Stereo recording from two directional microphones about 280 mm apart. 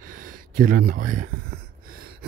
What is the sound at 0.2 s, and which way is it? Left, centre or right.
Speech, right.